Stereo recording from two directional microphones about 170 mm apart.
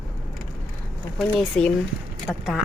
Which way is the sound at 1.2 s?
Centre (ahead or behind).